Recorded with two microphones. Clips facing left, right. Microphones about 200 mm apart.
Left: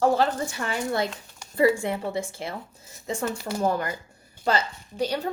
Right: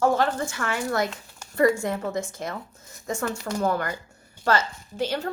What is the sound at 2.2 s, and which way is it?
Speech, 30° left (ahead or behind).